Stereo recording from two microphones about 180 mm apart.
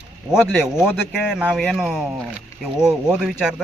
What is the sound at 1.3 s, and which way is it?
Speech, 5° right (ahead or behind).